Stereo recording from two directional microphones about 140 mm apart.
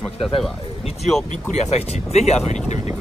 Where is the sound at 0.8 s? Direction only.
45° left (ahead or behind).